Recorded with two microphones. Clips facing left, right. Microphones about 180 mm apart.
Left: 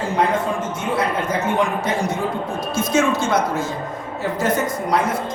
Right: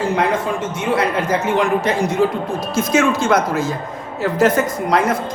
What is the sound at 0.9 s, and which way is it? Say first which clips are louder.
Speech: right 3 dB; 90° right.